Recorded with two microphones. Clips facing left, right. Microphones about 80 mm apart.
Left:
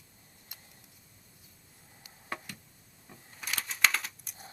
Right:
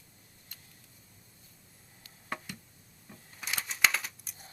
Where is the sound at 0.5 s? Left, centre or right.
Centre.